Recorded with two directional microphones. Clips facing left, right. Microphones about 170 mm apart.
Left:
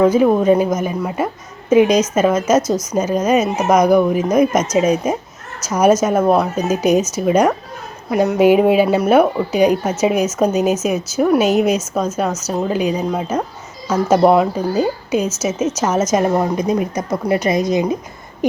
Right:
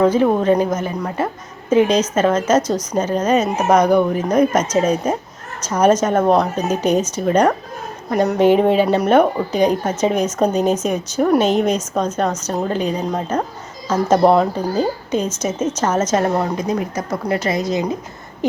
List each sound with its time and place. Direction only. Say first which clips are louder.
0.0 s a woman's voice: left 2 dB; 10° left (ahead or behind)